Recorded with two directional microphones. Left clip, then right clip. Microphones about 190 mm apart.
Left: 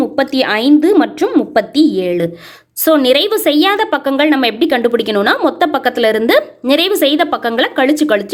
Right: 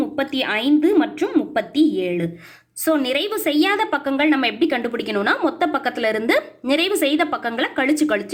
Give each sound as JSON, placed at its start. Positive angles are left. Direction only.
{"t": 0.0, "sound": "a woman's voice", "side_deg": 40}